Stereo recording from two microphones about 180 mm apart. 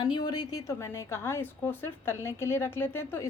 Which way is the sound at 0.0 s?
25° left (ahead or behind).